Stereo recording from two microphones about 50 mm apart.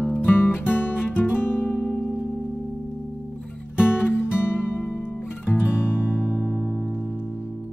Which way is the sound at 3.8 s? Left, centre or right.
Left.